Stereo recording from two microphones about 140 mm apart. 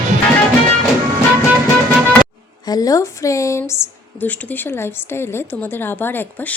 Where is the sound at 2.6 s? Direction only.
25° left (ahead or behind).